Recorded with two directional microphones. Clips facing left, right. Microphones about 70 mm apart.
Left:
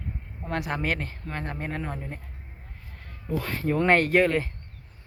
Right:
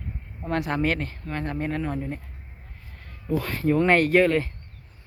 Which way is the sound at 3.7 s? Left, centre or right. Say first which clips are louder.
Right 2 dB; left.